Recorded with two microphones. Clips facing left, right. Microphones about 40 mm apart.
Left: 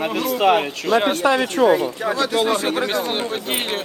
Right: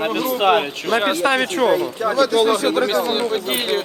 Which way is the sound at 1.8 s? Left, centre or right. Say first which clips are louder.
Right 3 dB; left.